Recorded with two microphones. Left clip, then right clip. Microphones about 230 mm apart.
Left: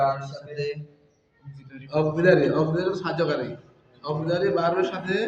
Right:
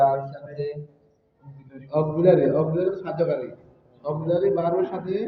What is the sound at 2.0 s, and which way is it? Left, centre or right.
A man's voice, left.